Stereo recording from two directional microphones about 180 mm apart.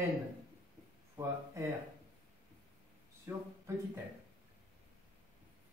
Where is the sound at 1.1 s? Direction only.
15° right (ahead or behind).